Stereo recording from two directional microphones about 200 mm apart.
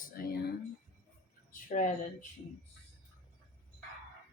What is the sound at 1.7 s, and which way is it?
Speech, 40° left (ahead or behind).